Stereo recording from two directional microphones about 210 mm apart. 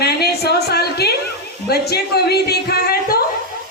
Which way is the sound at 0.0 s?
50° left (ahead or behind).